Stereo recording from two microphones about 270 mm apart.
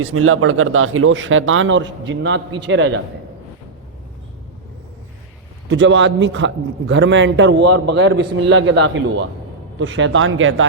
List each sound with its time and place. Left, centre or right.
0.0 s a man's voice: right
5.6 s a man's voice: right